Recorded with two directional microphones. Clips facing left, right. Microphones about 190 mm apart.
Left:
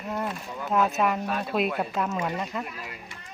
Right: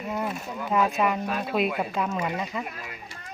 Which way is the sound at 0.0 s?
5° right (ahead or behind).